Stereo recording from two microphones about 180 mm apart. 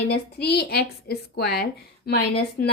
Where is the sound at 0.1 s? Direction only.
65° left (ahead or behind).